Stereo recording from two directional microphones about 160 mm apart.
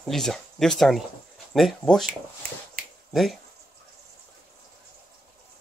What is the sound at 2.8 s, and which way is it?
Finger snapping, 60° right (ahead or behind).